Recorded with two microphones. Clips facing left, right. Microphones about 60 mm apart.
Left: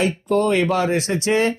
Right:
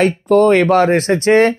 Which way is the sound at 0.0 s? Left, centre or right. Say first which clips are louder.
Right 7 dB; right.